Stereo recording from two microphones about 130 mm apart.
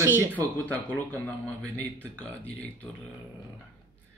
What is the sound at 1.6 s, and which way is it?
Speech, 10° left (ahead or behind).